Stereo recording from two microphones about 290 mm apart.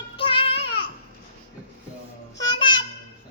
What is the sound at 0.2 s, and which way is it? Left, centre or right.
Child singing, centre.